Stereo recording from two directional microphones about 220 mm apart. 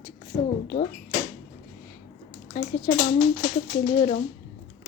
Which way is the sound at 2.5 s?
35° left (ahead or behind).